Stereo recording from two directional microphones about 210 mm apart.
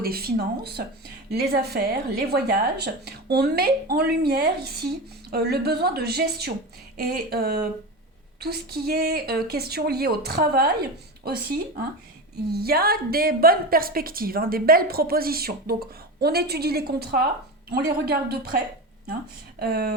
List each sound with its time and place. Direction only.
0.0 s a woman's voice: 45° right (ahead or behind)
19.5 s a woman's voice: 50° right (ahead or behind)